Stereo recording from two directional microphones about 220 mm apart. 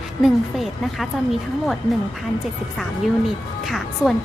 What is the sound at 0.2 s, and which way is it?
Speech, centre (ahead or behind).